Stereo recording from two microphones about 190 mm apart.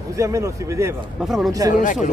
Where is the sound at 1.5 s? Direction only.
20° right (ahead or behind).